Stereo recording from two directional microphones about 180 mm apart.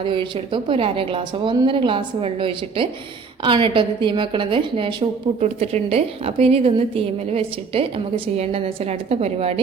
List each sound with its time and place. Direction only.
0.0 s a woman's voice: 30° right (ahead or behind)